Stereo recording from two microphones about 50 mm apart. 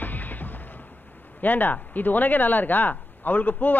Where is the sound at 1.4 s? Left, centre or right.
Left.